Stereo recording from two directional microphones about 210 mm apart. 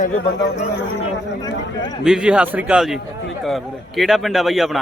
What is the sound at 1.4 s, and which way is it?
Speech, 20° left (ahead or behind).